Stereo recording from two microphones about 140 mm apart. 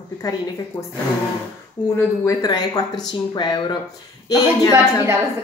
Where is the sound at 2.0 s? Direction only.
25° left (ahead or behind).